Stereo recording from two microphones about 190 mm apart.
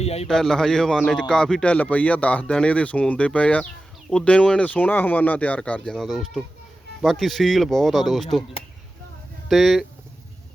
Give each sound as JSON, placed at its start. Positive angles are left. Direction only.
{"t": 0.0, "sound": "a sound", "side_deg": 35}
{"t": 0.3, "sound": "speech", "side_deg": 0}
{"t": 9.5, "sound": "speech", "side_deg": 0}